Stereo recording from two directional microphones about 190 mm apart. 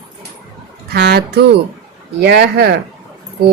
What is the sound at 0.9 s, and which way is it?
A woman's voice, 55° right (ahead or behind).